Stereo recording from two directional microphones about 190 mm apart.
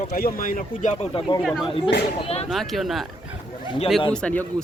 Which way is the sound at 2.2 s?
30° left (ahead or behind).